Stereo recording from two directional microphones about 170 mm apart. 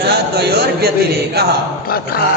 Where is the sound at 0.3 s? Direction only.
70° right (ahead or behind).